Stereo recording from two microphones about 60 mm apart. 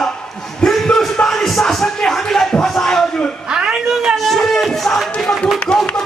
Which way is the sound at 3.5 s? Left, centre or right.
Centre.